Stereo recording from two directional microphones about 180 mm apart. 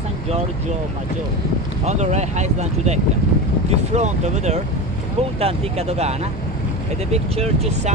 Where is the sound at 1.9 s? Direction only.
40° right (ahead or behind).